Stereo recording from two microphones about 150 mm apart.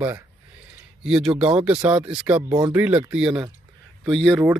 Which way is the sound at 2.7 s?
10° right (ahead or behind).